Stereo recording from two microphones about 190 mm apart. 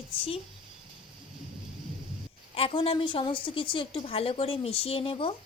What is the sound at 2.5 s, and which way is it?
A woman's voice, 30° left (ahead or behind).